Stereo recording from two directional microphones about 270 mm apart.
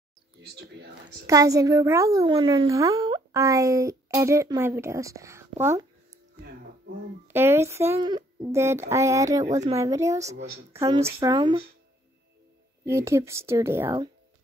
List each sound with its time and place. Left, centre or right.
1.2 s a woman's voice: centre
7.2 s a woman's voice: centre
10.2 s speech: right
10.7 s a woman's voice: centre
12.8 s a woman's voice: centre